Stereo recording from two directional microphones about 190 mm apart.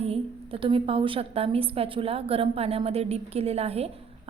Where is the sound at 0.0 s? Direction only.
30° right (ahead or behind).